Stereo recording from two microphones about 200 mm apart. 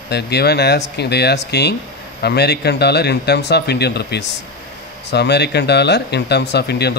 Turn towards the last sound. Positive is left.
turn(degrees=55)  # may be behind; listen again after turning